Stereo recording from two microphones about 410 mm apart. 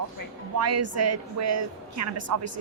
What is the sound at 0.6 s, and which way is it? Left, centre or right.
A woman's voice, right.